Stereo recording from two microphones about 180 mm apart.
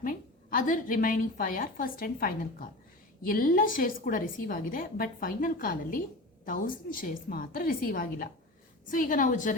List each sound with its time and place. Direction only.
0.0 s a woman's voice: 50° left (ahead or behind)